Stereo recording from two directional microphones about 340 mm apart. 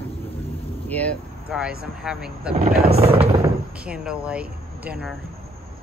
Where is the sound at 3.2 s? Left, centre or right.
Centre.